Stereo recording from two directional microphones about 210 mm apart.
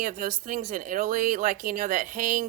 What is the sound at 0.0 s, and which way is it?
Speech, 40° right (ahead or behind).